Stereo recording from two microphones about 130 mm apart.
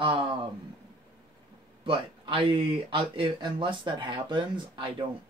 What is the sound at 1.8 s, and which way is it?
Speech, 40° right (ahead or behind).